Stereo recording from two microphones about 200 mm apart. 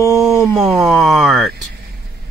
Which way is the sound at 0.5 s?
Centre (ahead or behind).